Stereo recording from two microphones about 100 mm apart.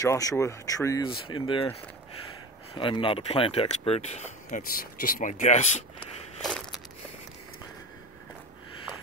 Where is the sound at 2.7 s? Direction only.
60° left (ahead or behind); by 4.0 s 85° left.